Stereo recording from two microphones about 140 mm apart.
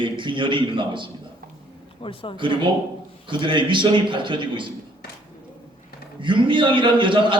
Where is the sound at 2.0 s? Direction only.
40° left (ahead or behind).